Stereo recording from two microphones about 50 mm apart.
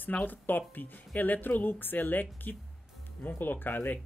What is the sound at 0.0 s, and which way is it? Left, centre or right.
Speech, left.